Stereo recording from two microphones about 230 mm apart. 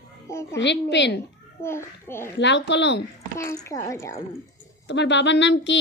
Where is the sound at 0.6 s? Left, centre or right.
Left.